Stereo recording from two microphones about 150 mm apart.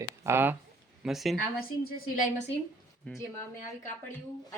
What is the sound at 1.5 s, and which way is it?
Speech, 80° left.